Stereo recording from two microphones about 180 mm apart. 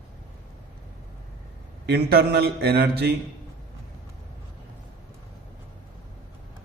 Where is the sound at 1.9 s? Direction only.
60° right (ahead or behind).